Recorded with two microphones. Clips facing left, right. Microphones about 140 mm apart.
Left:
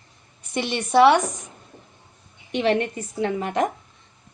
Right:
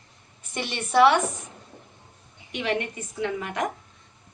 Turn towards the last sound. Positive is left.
turn(degrees=30)  # may be behind; listen again after turning